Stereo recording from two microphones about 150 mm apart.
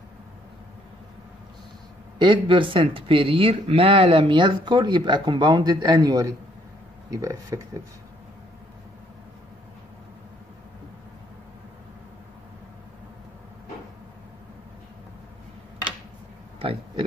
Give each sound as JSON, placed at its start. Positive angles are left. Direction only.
{"t": 2.1, "sound": "speech", "side_deg": -35}
{"t": 16.5, "sound": "speech", "side_deg": -35}